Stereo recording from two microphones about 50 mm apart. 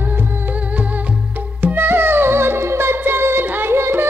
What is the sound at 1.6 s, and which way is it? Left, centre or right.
Music, right.